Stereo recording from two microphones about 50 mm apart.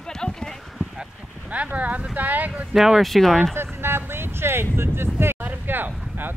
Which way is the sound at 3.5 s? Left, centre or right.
Right.